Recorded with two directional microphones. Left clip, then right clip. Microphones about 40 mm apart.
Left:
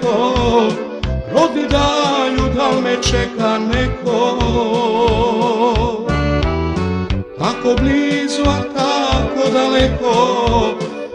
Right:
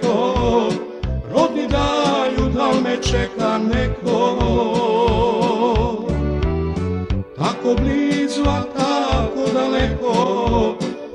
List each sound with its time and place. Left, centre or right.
0.0 s music: left